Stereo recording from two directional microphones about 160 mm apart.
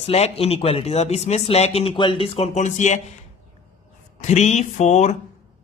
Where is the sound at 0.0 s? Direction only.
40° left (ahead or behind).